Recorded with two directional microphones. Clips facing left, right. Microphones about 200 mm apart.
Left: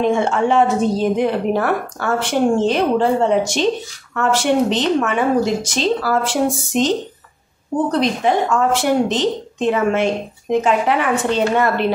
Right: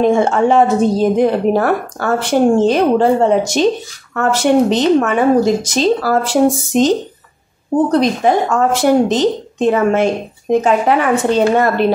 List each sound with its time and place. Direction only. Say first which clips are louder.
0.0 s a woman's voice: right 4 dB; 40° right (ahead or behind)
7.9 s a woman's voice: right 2 dB; 45° right (ahead or behind)